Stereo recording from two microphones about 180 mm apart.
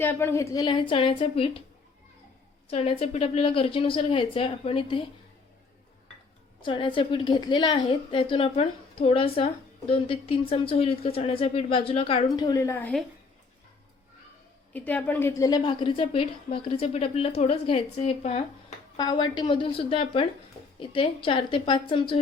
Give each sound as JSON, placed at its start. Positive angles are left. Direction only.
{"t": 0.0, "sound": "a woman's voice", "side_deg": 10}
{"t": 2.6, "sound": "a woman's voice", "side_deg": 30}
{"t": 6.6, "sound": "a woman's voice", "side_deg": 25}
{"t": 14.7, "sound": "a woman's voice", "side_deg": 10}
{"t": 18.9, "sound": "a woman's voice", "side_deg": 25}